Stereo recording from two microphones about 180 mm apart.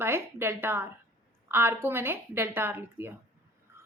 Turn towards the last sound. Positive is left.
turn(degrees=-10)  # may be behind; listen again after turning